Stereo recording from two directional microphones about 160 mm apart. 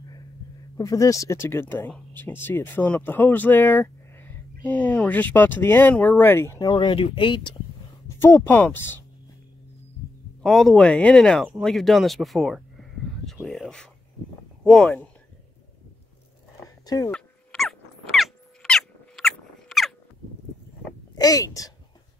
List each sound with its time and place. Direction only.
0.7 s speech: 20° left (ahead or behind)
8.2 s speech: 15° left (ahead or behind)
10.4 s speech: 5° left (ahead or behind)
16.5 s a sound: 20° left (ahead or behind)
17.1 s dog: 5° left (ahead or behind)
21.1 s a woman's voice: 25° left (ahead or behind)